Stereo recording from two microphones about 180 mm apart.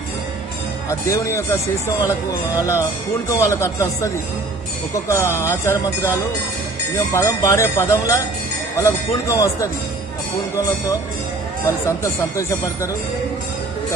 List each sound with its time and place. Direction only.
0.8 s speech: 15° left (ahead or behind)
7.2 s speech: 15° left (ahead or behind)
11.6 s speech: 15° left (ahead or behind)